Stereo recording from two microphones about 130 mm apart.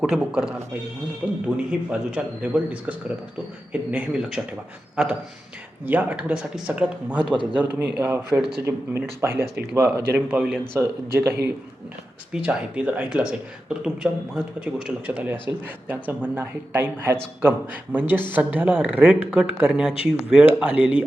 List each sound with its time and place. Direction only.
0.0 s a man's voice: 5° right (ahead or behind)